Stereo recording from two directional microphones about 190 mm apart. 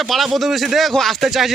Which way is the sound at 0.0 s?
Centre (ahead or behind).